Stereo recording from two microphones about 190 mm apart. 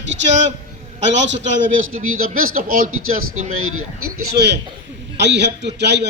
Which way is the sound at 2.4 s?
50° right (ahead or behind).